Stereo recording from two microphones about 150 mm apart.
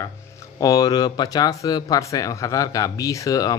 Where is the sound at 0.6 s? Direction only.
25° left (ahead or behind).